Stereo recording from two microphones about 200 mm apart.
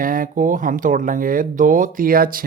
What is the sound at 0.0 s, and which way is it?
Speech, 45° right (ahead or behind).